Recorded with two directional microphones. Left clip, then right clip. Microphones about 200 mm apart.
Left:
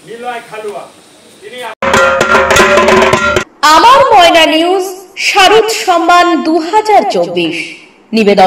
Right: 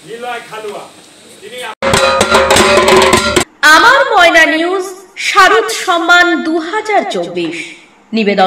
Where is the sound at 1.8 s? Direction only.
5° right (ahead or behind).